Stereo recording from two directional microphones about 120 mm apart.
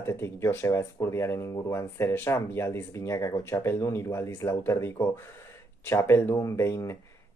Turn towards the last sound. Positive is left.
turn(degrees=25)  # may be behind; listen again after turning